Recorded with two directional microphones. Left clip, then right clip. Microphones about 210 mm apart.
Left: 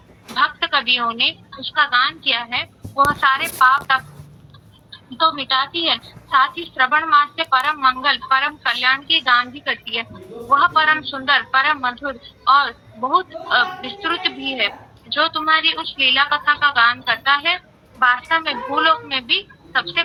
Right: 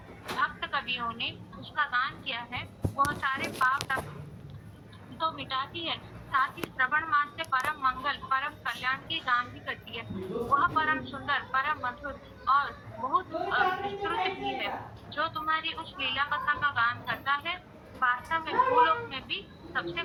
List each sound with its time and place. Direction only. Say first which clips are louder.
0.3 s a woman's voice: left 13 dB; 50° left (ahead or behind)